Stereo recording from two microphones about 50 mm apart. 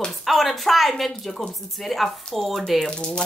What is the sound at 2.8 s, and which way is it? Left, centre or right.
Speech, centre.